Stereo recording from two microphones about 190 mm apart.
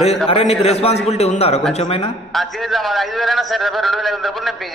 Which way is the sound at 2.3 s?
Centre (ahead or behind).